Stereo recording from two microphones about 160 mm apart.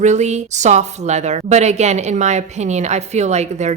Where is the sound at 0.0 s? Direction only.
45° right (ahead or behind).